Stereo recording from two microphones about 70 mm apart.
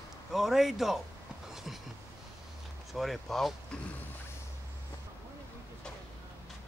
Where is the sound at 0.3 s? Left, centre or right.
Centre.